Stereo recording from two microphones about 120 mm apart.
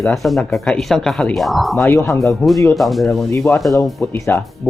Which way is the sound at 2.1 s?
Centre (ahead or behind).